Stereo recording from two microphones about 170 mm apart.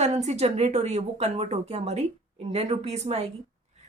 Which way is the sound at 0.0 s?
40° right (ahead or behind).